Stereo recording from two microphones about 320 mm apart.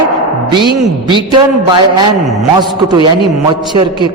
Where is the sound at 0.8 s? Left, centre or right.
Centre.